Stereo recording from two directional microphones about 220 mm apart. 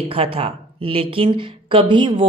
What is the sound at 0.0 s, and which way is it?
Speech, 25° right (ahead or behind).